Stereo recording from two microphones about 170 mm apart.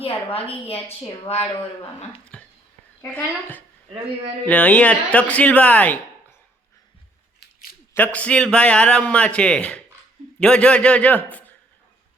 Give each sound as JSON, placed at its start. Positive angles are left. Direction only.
{"t": 0.0, "sound": "a woman's voice", "side_deg": 35}
{"t": 2.3, "sound": "a sound", "side_deg": 5}
{"t": 3.0, "sound": "a man's voice", "side_deg": 10}
{"t": 7.3, "sound": "scissors", "side_deg": 60}
{"t": 7.9, "sound": "a man's voice", "side_deg": 10}